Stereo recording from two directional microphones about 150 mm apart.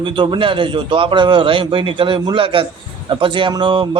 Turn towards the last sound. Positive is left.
turn(degrees=-35)  # may be behind; listen again after turning